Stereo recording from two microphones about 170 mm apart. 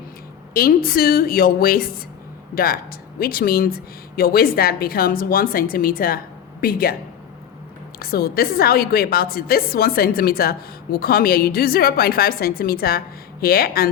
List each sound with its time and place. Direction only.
0.5 s a woman's voice: 60° left (ahead or behind)
7.9 s a woman's voice: 65° left (ahead or behind)